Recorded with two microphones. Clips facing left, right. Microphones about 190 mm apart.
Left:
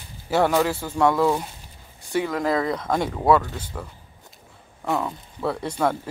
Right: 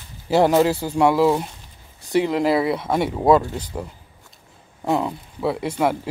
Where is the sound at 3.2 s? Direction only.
20° right (ahead or behind).